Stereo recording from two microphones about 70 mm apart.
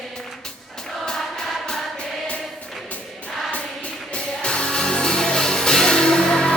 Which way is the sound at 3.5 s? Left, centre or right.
Centre.